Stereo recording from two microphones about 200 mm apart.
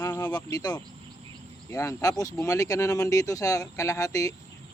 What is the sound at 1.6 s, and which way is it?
Speech, 15° left (ahead or behind).